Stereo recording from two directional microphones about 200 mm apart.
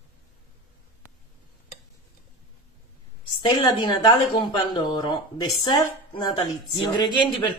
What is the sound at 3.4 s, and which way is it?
Speech, 20° left (ahead or behind).